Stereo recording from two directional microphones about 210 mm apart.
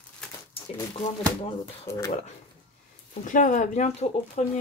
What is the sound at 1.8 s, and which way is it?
Speech, 15° left (ahead or behind).